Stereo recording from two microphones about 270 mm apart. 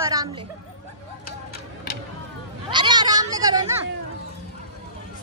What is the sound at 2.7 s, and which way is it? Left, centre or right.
Speech, centre.